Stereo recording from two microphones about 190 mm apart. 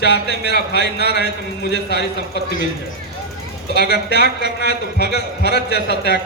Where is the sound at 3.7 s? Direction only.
60° left (ahead or behind).